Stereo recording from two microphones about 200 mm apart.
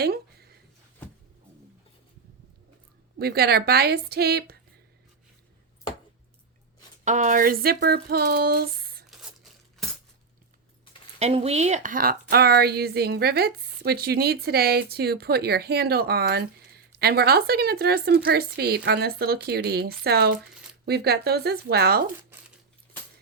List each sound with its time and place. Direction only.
0.0 s a sound: 50° right (ahead or behind)
3.2 s speech: 50° right (ahead or behind)
7.0 s speech: 40° right (ahead or behind)
9.0 s tearing: centre (ahead or behind)
11.2 s speech: 30° right (ahead or behind); by 22.0 s 50° right (ahead or behind)